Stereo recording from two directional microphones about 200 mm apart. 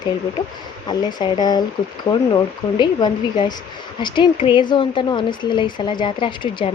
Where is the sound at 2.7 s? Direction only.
20° left (ahead or behind).